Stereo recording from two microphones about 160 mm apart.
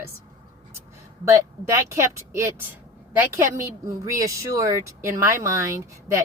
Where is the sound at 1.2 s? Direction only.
15° right (ahead or behind).